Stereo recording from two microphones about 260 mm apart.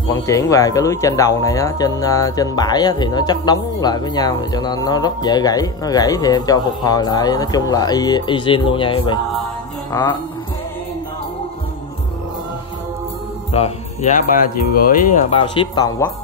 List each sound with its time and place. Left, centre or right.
0.1 s speech: centre
13.5 s music: left
14.8 s speech: left; by 16.1 s centre